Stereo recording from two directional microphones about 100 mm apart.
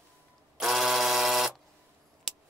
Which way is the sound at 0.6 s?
Centre (ahead or behind).